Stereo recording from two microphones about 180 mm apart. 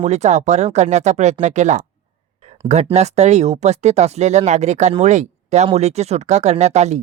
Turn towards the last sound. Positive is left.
turn(degrees=-40)  # may be behind; listen again after turning